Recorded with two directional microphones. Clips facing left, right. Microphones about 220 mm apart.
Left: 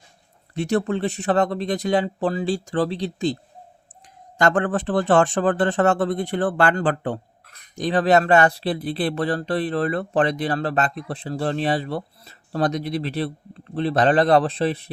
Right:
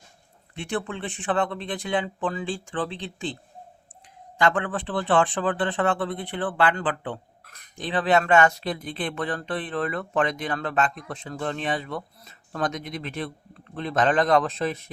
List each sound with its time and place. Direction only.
0.5 s speech: 40° left (ahead or behind)
4.4 s speech: 45° left (ahead or behind)